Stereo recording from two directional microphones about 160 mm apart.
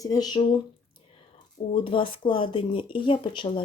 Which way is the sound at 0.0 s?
25° left (ahead or behind).